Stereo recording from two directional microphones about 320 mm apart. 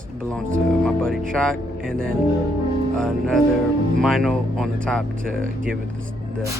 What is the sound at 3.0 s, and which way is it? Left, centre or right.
Speech, centre.